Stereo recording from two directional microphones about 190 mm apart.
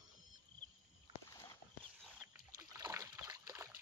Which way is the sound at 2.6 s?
15° right (ahead or behind).